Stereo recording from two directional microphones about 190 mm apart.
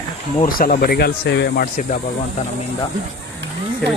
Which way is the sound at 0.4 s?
45° left (ahead or behind).